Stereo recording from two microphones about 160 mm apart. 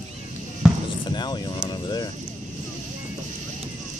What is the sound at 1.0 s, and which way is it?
Vehicle, 25° left (ahead or behind).